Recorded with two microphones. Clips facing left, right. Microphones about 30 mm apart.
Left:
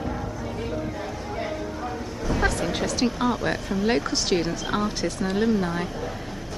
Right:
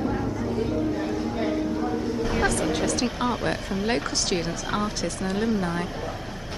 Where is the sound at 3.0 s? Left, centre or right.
Centre.